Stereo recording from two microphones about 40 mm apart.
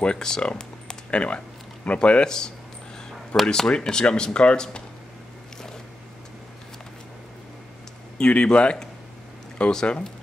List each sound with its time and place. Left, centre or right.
0.0 s speech: centre
0.4 s a sound: left
1.9 s speech: left
8.2 s speech: left
9.6 s speech: centre